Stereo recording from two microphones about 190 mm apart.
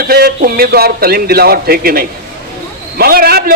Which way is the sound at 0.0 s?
55° right (ahead or behind).